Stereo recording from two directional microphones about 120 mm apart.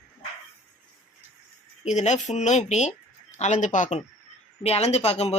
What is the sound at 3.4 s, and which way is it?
Speech, 85° left.